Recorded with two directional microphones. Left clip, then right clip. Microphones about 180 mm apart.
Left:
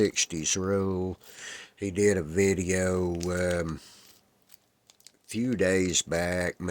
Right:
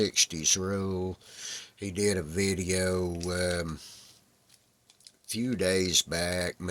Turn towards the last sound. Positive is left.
turn(degrees=45)  # may be behind; listen again after turning